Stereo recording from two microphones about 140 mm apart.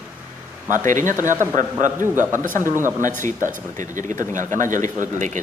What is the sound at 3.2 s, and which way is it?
Speech, 70° right (ahead or behind).